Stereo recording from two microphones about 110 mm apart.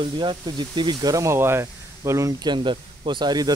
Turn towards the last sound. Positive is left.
turn(degrees=-40)  # may be behind; listen again after turning